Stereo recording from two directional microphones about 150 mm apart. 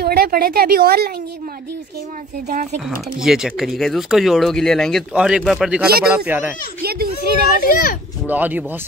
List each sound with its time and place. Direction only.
0.0 s a woman's voice: 90° right
2.4 s speech: 75° right (ahead or behind)
3.2 s a child's voice: 5° right (ahead or behind)
6.8 s a child's voice: 90° right
7.7 s a child's voice: 75° left (ahead or behind)
8.3 s a child's voice: 10° right (ahead or behind)